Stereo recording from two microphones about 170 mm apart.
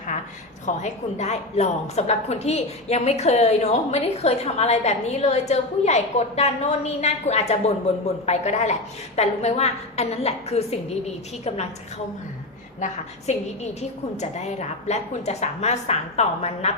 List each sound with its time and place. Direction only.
0.6 s a woman's voice: 40° left (ahead or behind)
12.8 s a woman's voice: 40° left (ahead or behind)